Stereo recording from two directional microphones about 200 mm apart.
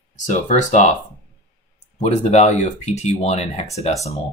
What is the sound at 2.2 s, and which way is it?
Speech, 35° left (ahead or behind).